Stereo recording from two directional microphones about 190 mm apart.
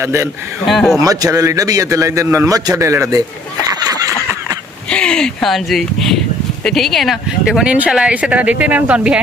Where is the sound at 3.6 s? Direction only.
20° right (ahead or behind).